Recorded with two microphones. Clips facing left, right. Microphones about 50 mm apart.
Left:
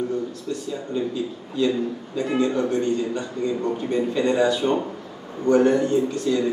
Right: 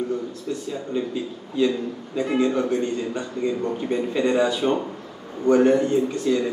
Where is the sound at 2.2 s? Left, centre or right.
Centre.